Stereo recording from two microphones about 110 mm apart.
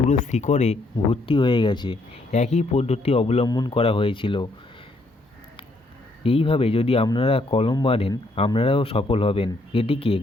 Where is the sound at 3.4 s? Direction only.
40° left (ahead or behind).